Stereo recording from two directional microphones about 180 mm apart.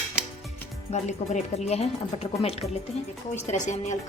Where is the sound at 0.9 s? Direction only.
40° left (ahead or behind).